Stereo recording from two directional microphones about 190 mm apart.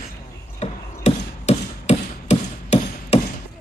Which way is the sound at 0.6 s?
35° left (ahead or behind).